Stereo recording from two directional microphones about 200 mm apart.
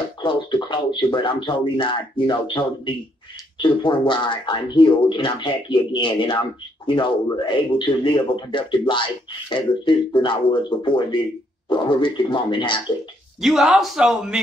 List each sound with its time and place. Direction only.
0.2 s speech: 25° left (ahead or behind)
13.4 s speech: centre (ahead or behind)